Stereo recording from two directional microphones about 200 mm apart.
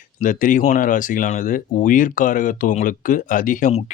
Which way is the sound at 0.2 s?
40° left (ahead or behind).